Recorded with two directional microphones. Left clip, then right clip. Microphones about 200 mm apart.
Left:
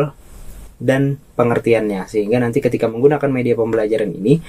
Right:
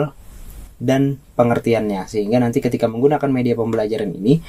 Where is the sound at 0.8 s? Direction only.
40° right (ahead or behind).